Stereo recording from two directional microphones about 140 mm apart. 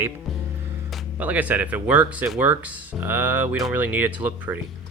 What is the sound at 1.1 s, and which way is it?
Speech, 10° right (ahead or behind).